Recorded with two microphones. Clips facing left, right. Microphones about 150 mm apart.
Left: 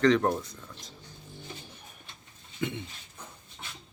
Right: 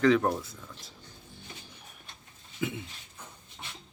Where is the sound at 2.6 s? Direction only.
5° right (ahead or behind).